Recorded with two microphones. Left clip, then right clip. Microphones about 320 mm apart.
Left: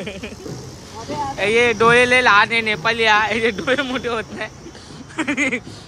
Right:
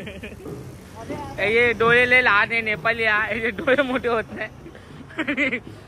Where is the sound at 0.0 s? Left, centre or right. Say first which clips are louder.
Left 6 dB; centre.